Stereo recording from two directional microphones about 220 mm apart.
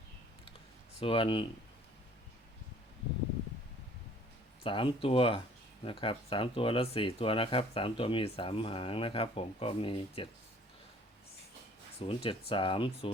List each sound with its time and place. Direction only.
0.9 s speech: 25° left (ahead or behind)
4.6 s speech: 25° left (ahead or behind)
11.9 s speech: 25° left (ahead or behind)